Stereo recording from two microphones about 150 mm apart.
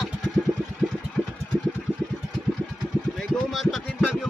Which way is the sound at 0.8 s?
10° right (ahead or behind).